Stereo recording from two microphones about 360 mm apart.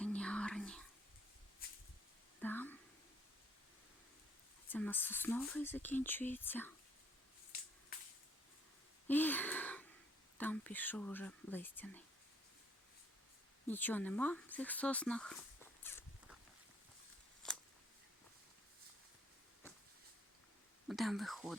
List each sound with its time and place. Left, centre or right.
0.0 s whispering: centre
2.4 s a sound: centre
4.7 s speech: centre
9.0 s a sound: centre
10.3 s speech: centre
13.7 s speech: centre
15.8 s walk: centre
17.4 s a sound: centre
20.8 s speech: centre